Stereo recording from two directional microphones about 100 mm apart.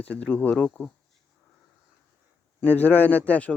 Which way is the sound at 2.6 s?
20° left (ahead or behind).